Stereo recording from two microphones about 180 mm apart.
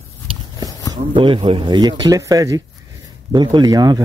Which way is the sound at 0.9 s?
25° right (ahead or behind).